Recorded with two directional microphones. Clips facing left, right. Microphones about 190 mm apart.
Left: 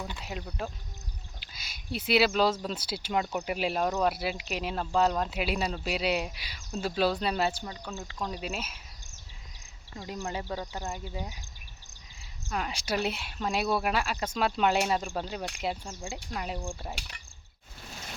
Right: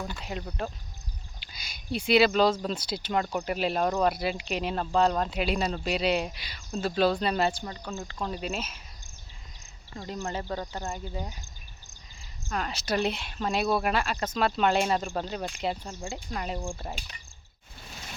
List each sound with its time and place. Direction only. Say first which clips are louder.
0.2 s speech: right 2 dB; 5° left (ahead or behind)
10.0 s speech: right 2 dB; 5° left (ahead or behind)
12.5 s speech: right 2 dB; 10° left (ahead or behind)
16.9 s cricket: right 1 dB; 75° left (ahead or behind)